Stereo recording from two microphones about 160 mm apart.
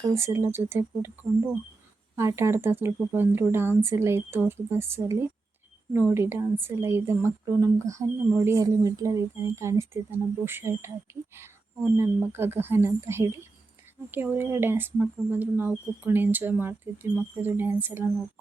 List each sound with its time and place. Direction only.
0.1 s speech: 15° right (ahead or behind)
2.1 s speech: 15° right (ahead or behind)